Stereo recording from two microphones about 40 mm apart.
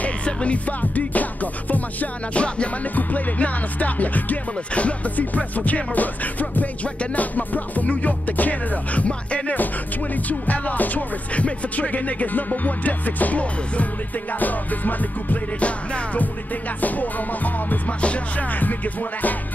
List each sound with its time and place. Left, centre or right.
0.0 s music: left
15.6 s music: left